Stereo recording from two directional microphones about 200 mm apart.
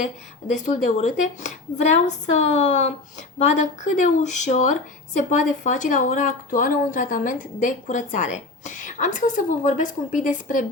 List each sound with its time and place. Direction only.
0.5 s speech: 35° left (ahead or behind)